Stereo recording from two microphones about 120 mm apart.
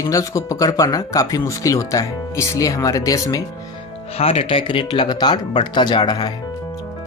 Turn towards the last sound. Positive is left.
turn(degrees=35)  # may be behind; listen again after turning